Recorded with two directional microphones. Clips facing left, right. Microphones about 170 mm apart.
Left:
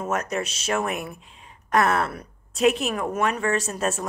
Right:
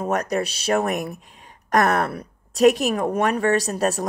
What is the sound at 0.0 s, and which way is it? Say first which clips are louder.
A woman's voice: right 4 dB; 35° right (ahead or behind).